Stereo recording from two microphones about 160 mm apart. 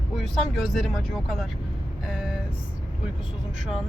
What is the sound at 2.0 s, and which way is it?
Vehicle, 5° right (ahead or behind).